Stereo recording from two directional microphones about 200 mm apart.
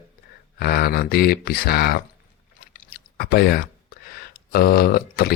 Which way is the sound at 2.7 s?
45° left (ahead or behind).